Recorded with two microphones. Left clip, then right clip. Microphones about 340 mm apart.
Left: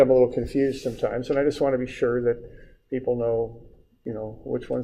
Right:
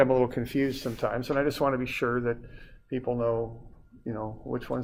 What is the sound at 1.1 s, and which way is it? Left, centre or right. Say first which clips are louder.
Speech: left 4 dB; right.